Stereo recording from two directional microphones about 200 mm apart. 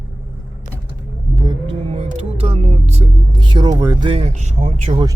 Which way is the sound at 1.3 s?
25° right (ahead or behind).